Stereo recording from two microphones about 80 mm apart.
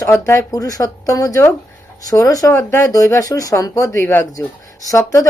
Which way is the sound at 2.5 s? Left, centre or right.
Left.